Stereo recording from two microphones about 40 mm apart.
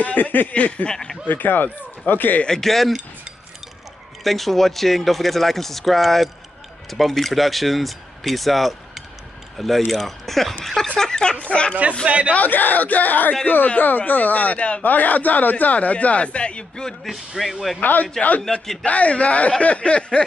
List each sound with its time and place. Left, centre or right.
0.0 s a sound: left
0.5 s a man's voice: left
0.8 s speech: centre
1.2 s speech: left
2.4 s speech: centre
4.2 s speech: centre
11.0 s speech: centre
11.3 s a sound: left
12.1 s a man's voice: right
12.4 s a man's voice: left
17.4 s speech: centre
18.9 s a man's voice: left
19.6 s a sound: left